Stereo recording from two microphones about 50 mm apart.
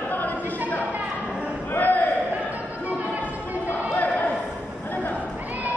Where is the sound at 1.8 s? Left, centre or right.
Left.